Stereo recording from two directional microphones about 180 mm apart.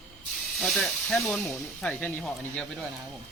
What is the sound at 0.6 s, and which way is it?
Speech, centre (ahead or behind).